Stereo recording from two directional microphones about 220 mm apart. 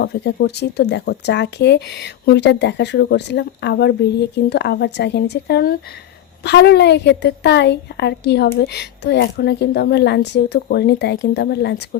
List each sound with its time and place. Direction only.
0.0 s speech: 45° left (ahead or behind)